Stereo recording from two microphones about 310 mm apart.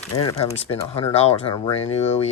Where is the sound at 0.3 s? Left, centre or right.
Centre.